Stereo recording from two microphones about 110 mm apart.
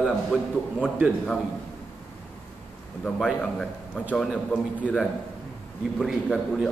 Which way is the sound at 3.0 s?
5° left (ahead or behind).